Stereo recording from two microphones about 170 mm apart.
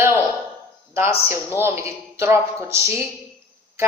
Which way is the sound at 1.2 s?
15° right (ahead or behind).